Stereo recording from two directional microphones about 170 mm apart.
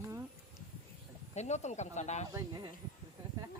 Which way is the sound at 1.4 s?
45° left (ahead or behind).